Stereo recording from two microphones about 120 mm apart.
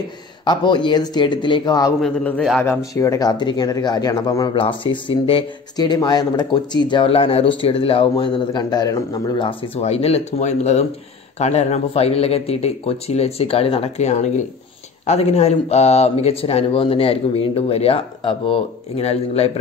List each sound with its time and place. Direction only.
0.5 s speech: 40° left (ahead or behind)
2.0 s a man's voice: 5° left (ahead or behind)
2.6 s speech: 25° left (ahead or behind)
4.6 s speech: 45° left (ahead or behind)
5.8 s speech: 35° left (ahead or behind)
7.1 s speech: 55° left (ahead or behind); by 9.5 s 35° left (ahead or behind)
9.8 s a man's voice: 60° left (ahead or behind); by 14.4 s 75° left (ahead or behind)
15.0 s a man's voice: 65° left (ahead or behind)